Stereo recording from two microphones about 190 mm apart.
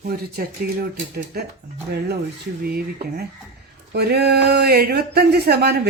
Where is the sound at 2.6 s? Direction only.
55° right (ahead or behind).